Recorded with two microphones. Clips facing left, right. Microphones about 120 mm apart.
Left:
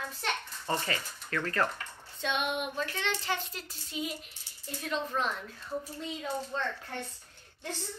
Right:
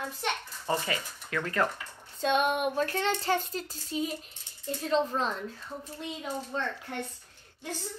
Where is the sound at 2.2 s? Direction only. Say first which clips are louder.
Right 6 dB; 45° right (ahead or behind).